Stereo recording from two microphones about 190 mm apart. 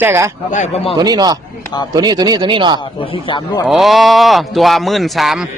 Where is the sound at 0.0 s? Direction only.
10° right (ahead or behind).